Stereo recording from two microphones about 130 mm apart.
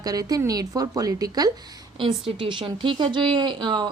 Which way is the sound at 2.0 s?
40° right (ahead or behind).